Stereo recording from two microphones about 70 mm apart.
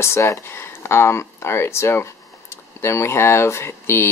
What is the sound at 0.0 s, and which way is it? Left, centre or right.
Speech, left.